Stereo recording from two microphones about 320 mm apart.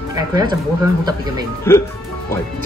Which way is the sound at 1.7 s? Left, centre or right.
Centre.